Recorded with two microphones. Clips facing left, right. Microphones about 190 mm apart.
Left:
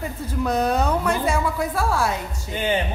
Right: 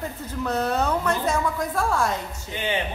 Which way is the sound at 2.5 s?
45° left (ahead or behind).